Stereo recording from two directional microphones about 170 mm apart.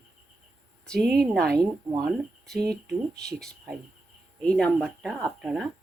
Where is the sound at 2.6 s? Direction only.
75° right (ahead or behind).